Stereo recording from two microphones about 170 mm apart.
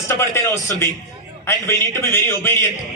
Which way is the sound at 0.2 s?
15° left (ahead or behind).